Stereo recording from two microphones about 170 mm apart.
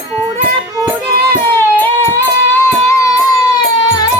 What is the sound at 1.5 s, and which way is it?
Music, 15° left (ahead or behind).